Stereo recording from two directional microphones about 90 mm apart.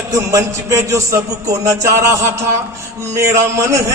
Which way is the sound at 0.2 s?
35° right (ahead or behind).